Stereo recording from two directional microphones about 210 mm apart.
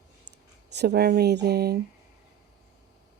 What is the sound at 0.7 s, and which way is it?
Speech, 50° right (ahead or behind).